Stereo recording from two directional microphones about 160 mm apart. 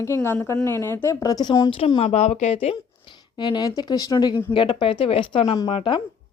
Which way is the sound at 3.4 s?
25° left (ahead or behind).